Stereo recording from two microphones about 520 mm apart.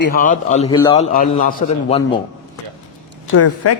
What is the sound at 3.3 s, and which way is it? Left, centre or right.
Speech, left.